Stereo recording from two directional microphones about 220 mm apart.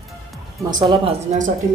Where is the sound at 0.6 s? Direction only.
20° right (ahead or behind).